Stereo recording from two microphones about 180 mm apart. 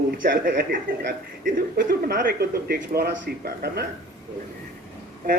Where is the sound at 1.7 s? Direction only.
50° right (ahead or behind).